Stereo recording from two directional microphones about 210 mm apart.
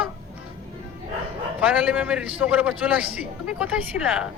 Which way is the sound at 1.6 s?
5° right (ahead or behind).